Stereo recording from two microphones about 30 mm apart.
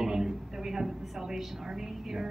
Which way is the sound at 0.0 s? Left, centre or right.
Centre.